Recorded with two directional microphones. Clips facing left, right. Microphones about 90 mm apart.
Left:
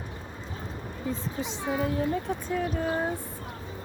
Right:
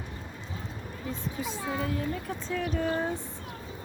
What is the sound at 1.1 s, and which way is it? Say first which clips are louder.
Speech: right 2 dB; 25° left (ahead or behind).